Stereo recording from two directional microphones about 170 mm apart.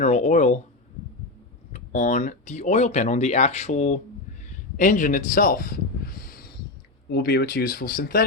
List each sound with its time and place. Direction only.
0.0 s speech: 40° left (ahead or behind)
1.7 s speech: 50° left (ahead or behind)
7.1 s speech: 70° left (ahead or behind)